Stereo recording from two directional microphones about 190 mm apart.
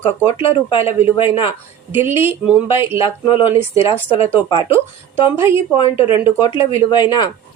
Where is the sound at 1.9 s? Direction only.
10° right (ahead or behind).